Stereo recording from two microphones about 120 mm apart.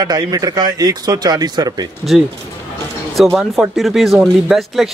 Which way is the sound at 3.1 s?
Centre (ahead or behind).